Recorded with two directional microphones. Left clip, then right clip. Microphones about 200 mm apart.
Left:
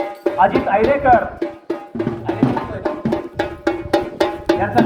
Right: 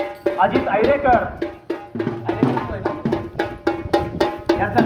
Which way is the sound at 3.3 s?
20° left (ahead or behind).